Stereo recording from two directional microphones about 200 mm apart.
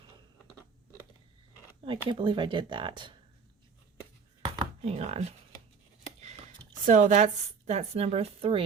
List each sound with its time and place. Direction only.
1.8 s speech: 25° right (ahead or behind)
4.4 s a sound: 30° right (ahead or behind)
6.8 s speech: 40° right (ahead or behind)